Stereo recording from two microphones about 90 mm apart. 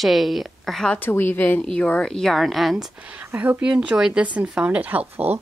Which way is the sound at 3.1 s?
15° right (ahead or behind).